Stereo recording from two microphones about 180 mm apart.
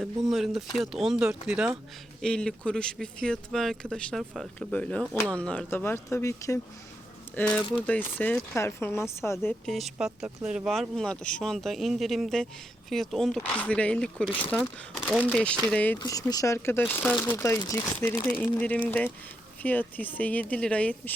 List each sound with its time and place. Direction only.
0.0 s speech: centre (ahead or behind)
9.6 s speech: centre (ahead or behind)
15.2 s speech: 5° left (ahead or behind)
16.0 s speech: 20° left (ahead or behind)